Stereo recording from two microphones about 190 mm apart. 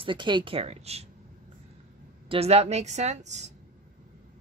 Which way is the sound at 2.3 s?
30° right (ahead or behind).